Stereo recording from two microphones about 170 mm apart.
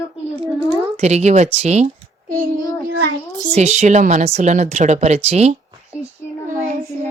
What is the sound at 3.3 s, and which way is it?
A woman's voice, 45° right (ahead or behind).